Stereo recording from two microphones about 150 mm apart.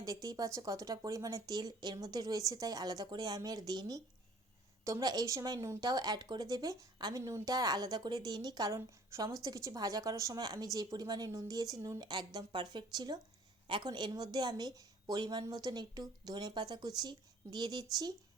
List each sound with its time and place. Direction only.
0.0 s speech: 25° right (ahead or behind)